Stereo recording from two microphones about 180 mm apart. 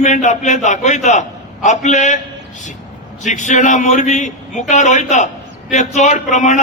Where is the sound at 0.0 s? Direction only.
40° left (ahead or behind).